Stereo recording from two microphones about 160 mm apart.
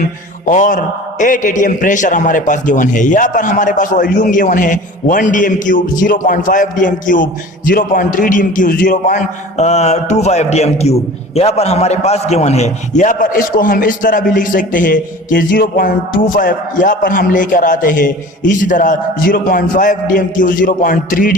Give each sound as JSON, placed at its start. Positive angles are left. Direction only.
{"t": 0.4, "sound": "a man's voice", "side_deg": 55}